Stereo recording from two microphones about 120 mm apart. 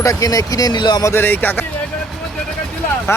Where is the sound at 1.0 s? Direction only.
20° left (ahead or behind).